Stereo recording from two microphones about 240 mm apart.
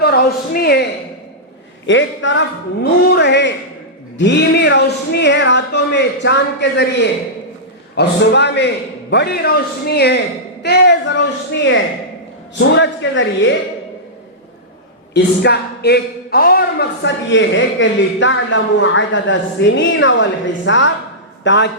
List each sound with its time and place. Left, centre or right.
0.0 s a woman's voice: left
1.9 s speech: left
15.1 s speech: left